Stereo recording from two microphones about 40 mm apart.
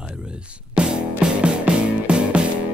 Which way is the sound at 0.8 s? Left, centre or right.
Right.